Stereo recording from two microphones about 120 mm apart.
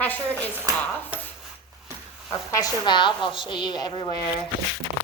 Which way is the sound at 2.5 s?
35° left (ahead or behind).